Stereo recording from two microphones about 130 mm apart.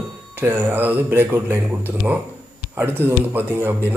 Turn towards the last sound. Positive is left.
turn(degrees=-15)  # may be behind; listen again after turning